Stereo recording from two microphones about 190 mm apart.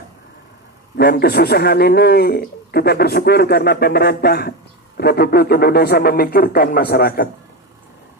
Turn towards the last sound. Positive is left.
turn(degrees=55)  # may be behind; listen again after turning